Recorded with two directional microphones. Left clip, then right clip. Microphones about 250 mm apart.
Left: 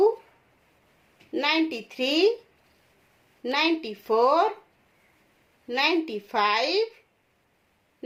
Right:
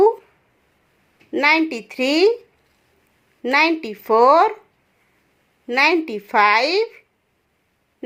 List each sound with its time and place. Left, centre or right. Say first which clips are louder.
1.3 s a woman's voice: right 8 dB; right
3.4 s a woman's voice: right 8 dB; right
5.6 s a woman's voice: right 8 dB; right